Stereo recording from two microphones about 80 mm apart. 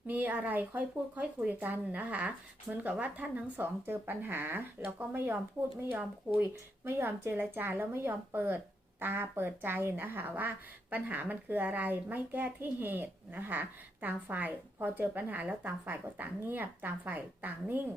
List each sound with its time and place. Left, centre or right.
0.1 s a woman's voice: right